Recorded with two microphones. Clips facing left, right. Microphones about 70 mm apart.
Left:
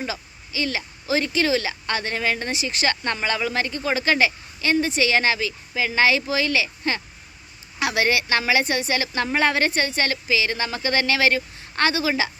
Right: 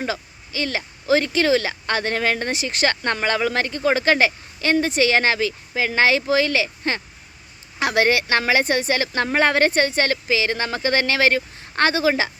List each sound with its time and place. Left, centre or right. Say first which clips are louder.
0.0 s speech: right 4 dB; right